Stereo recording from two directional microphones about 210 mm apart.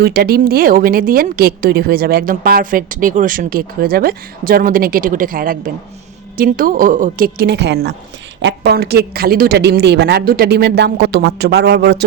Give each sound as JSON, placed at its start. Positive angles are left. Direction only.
{"t": 0.0, "sound": "a woman's voice", "side_deg": -50}